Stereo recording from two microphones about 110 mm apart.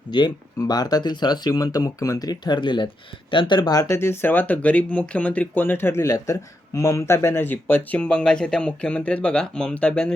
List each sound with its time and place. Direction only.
0.1 s speech: 40° left (ahead or behind)
3.9 s speech: 20° left (ahead or behind)